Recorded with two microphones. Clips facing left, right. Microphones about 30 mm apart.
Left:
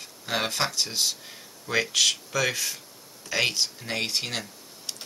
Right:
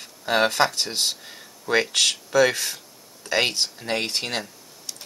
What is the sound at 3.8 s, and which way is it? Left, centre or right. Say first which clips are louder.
Speech: right 3 dB; right.